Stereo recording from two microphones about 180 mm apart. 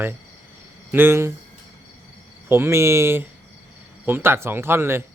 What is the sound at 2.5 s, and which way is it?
Speech, 15° right (ahead or behind).